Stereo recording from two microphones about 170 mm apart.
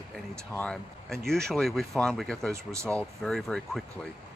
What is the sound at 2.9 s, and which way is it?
Speech, 5° left (ahead or behind).